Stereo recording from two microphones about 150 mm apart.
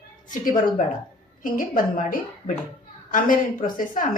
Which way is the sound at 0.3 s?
60° left (ahead or behind).